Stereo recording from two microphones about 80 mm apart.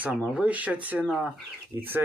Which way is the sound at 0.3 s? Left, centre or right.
Centre.